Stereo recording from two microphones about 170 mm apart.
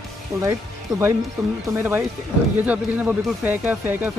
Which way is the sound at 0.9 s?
15° right (ahead or behind).